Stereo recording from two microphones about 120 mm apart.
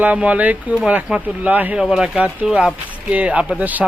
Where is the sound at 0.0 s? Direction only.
10° right (ahead or behind).